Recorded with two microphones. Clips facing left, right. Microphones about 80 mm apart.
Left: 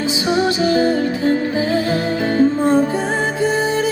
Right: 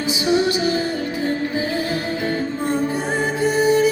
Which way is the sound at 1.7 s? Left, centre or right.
Left.